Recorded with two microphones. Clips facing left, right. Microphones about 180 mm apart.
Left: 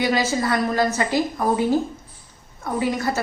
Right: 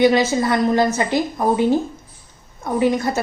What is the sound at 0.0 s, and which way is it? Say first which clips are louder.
A woman's voice: right 6 dB; 20° right (ahead or behind).